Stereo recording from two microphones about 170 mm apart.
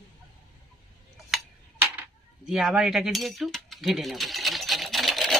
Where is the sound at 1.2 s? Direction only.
5° right (ahead or behind).